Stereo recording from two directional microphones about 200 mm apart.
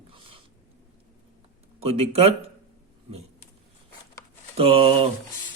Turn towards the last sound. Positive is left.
turn(degrees=-30)  # may be behind; listen again after turning